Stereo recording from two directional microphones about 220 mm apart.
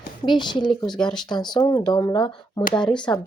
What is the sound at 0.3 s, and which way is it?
Speech, 20° left (ahead or behind).